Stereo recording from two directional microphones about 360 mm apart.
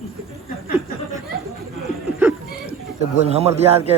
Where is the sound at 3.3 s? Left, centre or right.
Centre.